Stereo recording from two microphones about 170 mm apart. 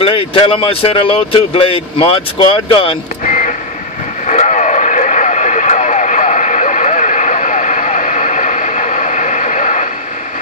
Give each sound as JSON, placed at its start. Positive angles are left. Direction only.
{"t": 0.0, "sound": "speech", "side_deg": 35}
{"t": 3.3, "sound": "vehicle", "side_deg": 50}